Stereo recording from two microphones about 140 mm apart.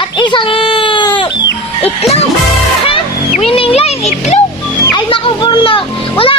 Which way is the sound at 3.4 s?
40° left (ahead or behind).